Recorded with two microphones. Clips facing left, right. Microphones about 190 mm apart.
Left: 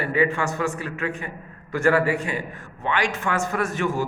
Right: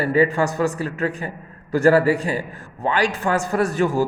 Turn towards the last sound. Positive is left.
turn(degrees=-35)  # may be behind; listen again after turning